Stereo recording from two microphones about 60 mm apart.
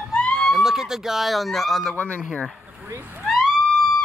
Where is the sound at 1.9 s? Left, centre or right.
Left.